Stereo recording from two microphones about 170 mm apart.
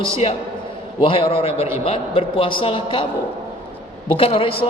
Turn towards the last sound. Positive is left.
turn(degrees=30)  # may be behind; listen again after turning